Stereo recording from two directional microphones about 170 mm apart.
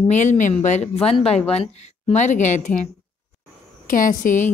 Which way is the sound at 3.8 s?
50° left (ahead or behind).